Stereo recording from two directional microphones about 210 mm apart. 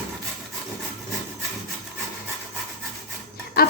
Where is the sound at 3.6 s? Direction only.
45° left (ahead or behind).